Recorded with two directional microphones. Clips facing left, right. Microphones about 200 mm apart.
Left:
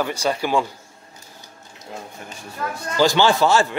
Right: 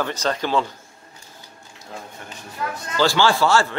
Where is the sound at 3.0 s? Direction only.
20° left (ahead or behind).